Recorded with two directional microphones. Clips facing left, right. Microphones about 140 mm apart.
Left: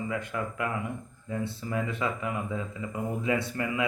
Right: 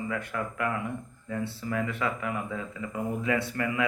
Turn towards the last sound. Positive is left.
turn(degrees=20)  # may be behind; listen again after turning